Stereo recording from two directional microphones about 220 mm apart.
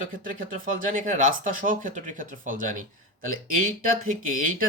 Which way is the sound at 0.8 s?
35° right (ahead or behind).